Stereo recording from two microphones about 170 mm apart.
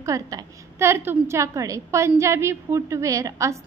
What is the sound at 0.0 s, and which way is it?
A woman's voice, 20° right (ahead or behind).